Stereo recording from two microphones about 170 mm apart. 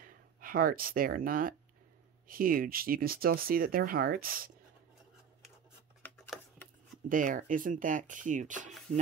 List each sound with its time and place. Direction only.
0.0 s speech: 55° right (ahead or behind)
6.0 s a sound: centre (ahead or behind)
7.1 s speech: 50° right (ahead or behind)